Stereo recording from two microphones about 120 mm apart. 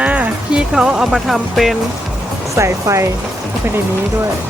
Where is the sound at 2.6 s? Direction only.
25° right (ahead or behind).